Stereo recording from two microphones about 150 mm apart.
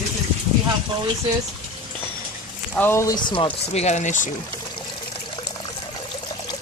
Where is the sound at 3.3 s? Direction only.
35° left (ahead or behind); by 4.3 s 55° left (ahead or behind).